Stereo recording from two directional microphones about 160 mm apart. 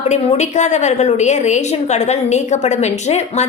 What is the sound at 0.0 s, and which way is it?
A woman's voice, 45° left (ahead or behind).